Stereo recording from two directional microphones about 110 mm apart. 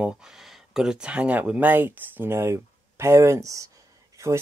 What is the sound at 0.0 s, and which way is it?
Speech, 5° right (ahead or behind).